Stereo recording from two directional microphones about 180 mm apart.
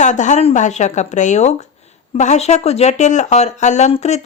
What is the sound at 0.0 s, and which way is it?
Speech, 40° left (ahead or behind).